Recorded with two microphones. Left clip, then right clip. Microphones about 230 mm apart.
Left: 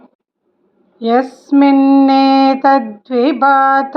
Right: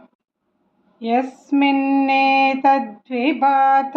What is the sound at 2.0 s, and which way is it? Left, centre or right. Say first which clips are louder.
Female singing: left 5 dB; centre.